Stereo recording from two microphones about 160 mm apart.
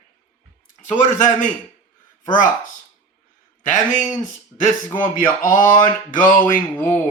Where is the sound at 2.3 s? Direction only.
55° left (ahead or behind).